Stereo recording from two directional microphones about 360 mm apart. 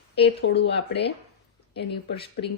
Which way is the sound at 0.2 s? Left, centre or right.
Left.